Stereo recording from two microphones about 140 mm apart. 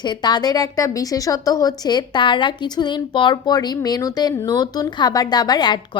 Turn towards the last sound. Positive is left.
turn(degrees=30)  # may be behind; listen again after turning